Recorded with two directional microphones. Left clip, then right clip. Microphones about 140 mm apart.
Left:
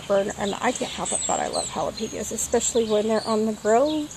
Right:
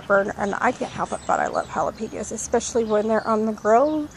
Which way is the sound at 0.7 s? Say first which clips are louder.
Right 2 dB; centre (ahead or behind).